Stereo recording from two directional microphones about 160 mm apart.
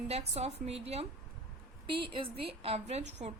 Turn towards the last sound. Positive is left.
turn(degrees=-45)  # may be behind; listen again after turning